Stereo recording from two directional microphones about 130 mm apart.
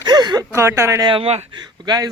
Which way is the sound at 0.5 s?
20° right (ahead or behind).